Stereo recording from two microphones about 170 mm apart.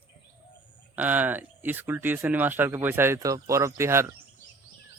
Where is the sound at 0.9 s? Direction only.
10° right (ahead or behind).